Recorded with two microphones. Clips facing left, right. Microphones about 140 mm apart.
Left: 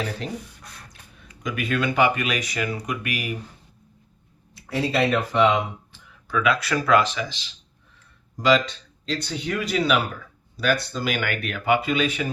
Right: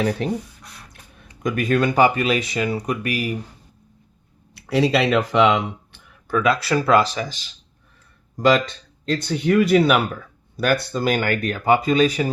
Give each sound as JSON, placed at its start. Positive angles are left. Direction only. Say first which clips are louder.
{"t": 0.6, "sound": "beatboxing", "louder": "right 1 dB", "side_deg": 0}
{"t": 1.4, "sound": "speech", "louder": "right 6 dB", "side_deg": -45}
{"t": 4.5, "sound": "speech", "louder": "right 5 dB", "side_deg": -85}
{"t": 6.2, "sound": "speech", "louder": "right 3 dB", "side_deg": -45}
{"t": 6.5, "sound": "speech", "louder": "right 2 dB", "side_deg": -30}